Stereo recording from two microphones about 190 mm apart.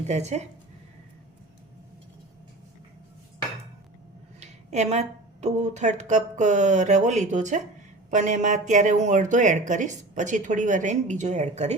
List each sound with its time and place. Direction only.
0.1 s speech: 35° right (ahead or behind)
4.4 s speech: 35° right (ahead or behind)